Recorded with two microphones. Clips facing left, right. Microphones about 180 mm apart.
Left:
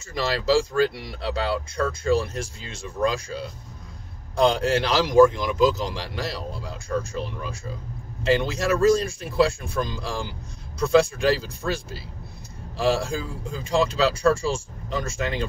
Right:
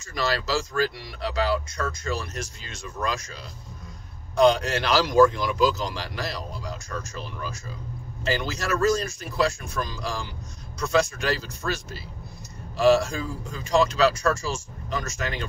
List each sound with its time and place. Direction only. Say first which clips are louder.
0.0 s speech: left 2 dB; 25° left (ahead or behind)
8.3 s speech: left 5 dB; 25° left (ahead or behind)